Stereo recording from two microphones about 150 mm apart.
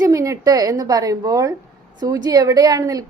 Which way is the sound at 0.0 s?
20° right (ahead or behind).